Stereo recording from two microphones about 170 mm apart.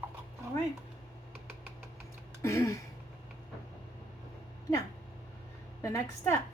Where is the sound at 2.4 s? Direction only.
15° left (ahead or behind).